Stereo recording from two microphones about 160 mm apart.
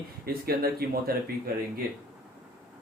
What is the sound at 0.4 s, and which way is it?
Speech, 70° right (ahead or behind).